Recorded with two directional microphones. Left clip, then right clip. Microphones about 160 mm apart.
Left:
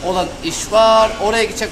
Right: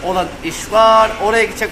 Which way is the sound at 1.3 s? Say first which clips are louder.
Right 2 dB; 40° left (ahead or behind).